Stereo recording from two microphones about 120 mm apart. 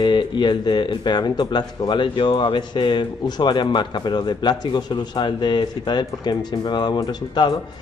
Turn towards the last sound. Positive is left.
turn(degrees=35)  # may be behind; listen again after turning